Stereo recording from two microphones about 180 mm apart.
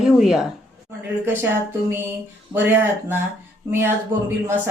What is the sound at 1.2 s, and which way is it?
Speech, 10° right (ahead or behind).